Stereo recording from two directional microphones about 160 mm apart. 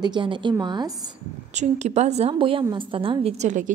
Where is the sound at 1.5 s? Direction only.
45° right (ahead or behind).